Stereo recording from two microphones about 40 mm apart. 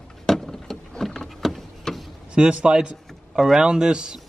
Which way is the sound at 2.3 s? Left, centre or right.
Right.